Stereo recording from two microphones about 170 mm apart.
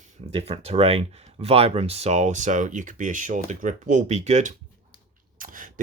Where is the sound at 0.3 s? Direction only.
35° right (ahead or behind).